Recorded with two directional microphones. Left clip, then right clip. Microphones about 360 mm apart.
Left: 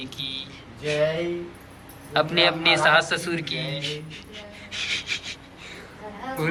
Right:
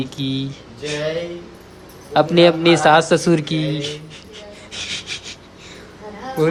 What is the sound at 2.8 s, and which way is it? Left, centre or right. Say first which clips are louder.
A woman's voice: right 7 dB; centre.